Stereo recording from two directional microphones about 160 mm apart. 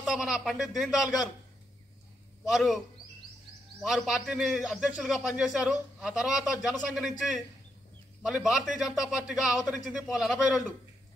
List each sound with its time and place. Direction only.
0.0 s a man's voice: centre (ahead or behind)
2.5 s a man's voice: centre (ahead or behind)
3.8 s a man's voice: centre (ahead or behind)